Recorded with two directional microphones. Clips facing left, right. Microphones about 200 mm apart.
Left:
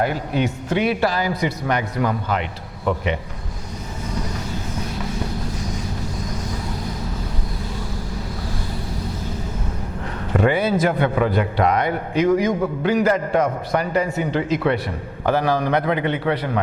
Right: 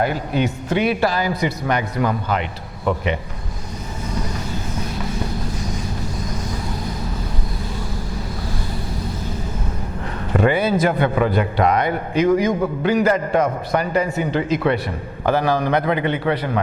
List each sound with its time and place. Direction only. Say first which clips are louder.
0.0 s a man's voice: right 1 dB; 15° right (ahead or behind)
10.3 s a man's voice: right 1 dB; 15° right (ahead or behind)